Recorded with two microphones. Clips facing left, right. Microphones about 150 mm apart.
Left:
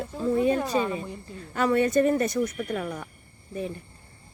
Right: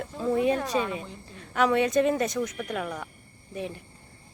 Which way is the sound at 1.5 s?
90° right.